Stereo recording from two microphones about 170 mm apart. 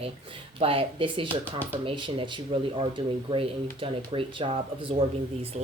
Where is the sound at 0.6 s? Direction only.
30° right (ahead or behind).